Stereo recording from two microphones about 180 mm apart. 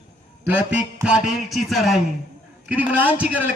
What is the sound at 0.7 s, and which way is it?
Music, 5° right (ahead or behind).